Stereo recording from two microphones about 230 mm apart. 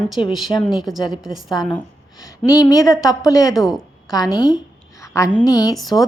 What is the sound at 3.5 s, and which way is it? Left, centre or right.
Speech, centre.